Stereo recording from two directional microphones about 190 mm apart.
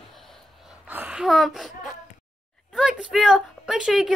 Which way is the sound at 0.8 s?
10° right (ahead or behind).